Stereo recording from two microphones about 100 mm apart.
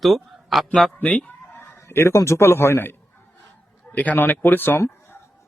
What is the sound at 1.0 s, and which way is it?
A man's voice, 10° left (ahead or behind).